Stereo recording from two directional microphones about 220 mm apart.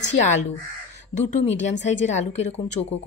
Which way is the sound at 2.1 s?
30° left (ahead or behind).